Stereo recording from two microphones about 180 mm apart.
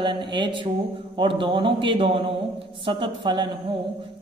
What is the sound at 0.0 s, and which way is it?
Speech, 25° right (ahead or behind).